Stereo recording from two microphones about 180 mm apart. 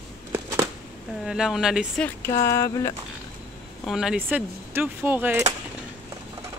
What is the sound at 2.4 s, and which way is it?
Speech, 15° left (ahead or behind).